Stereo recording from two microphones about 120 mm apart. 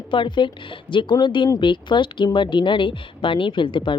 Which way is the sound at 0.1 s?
40° left (ahead or behind).